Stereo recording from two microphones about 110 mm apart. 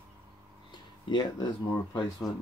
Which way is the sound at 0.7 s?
40° left (ahead or behind).